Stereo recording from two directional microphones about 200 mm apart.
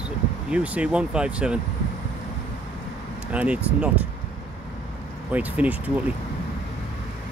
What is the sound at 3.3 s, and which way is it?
Speech, 5° right (ahead or behind).